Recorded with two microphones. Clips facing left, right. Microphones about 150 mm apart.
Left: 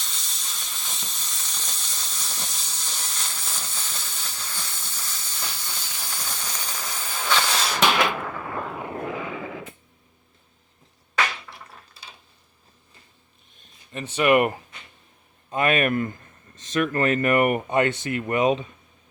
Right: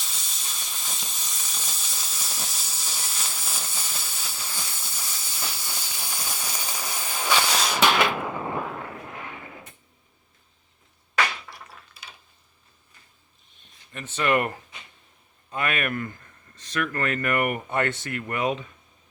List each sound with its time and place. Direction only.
0.0 s steam: 5° right (ahead or behind)
8.5 s a sound: centre (ahead or behind)
9.0 s artillery fire: 90° left
13.9 s speech: 15° left (ahead or behind)